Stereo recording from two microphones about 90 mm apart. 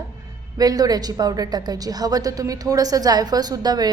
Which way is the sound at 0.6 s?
45° right (ahead or behind).